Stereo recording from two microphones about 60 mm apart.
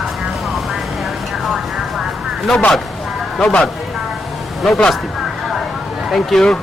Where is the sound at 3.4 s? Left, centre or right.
Centre.